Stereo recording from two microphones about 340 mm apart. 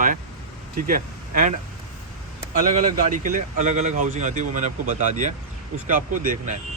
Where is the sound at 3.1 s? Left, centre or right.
Right.